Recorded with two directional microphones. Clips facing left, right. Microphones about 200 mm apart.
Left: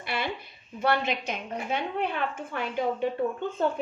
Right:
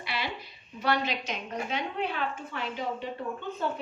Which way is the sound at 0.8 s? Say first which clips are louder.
Left 2 dB; 50° left (ahead or behind).